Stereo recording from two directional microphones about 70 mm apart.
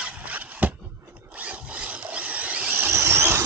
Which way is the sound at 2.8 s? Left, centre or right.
Right.